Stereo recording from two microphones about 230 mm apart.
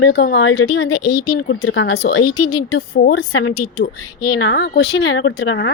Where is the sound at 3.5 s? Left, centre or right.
Left.